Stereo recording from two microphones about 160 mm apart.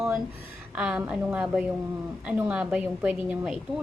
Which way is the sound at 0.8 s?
5° right (ahead or behind).